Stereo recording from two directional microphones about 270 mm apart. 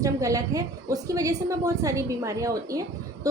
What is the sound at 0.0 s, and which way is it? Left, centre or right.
A woman's voice, centre.